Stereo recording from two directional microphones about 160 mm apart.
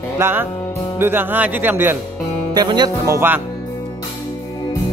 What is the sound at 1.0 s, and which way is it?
Speech, 15° right (ahead or behind).